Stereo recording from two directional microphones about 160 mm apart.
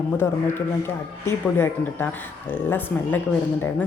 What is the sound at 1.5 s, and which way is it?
Speech, 15° left (ahead or behind).